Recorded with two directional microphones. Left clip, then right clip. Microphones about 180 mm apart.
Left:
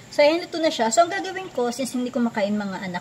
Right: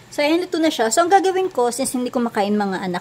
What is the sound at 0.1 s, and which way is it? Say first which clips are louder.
Speech: even; 40° right (ahead or behind).